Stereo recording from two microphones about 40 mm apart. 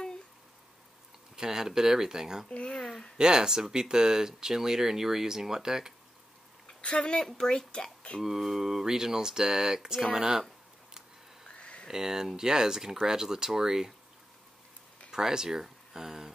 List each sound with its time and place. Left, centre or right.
1.3 s speech: centre
2.5 s a sound: left
3.2 s speech: centre
6.8 s a woman's voice: left
8.2 s speech: centre
11.4 s a sound: left
11.9 s speech: centre
15.0 s speech: centre